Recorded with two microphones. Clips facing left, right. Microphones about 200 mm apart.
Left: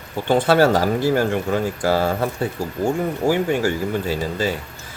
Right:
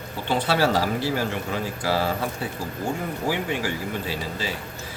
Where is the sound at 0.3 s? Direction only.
50° left (ahead or behind).